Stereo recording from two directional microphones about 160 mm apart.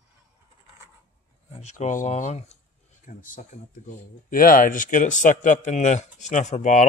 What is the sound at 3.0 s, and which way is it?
Speech, 55° left (ahead or behind).